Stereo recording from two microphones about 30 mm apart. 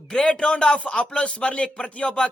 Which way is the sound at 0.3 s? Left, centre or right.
Left.